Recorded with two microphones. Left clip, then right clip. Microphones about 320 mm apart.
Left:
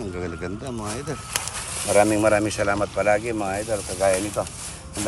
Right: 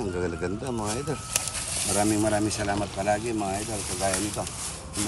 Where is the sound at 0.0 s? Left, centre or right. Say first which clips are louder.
Right 1 dB; centre.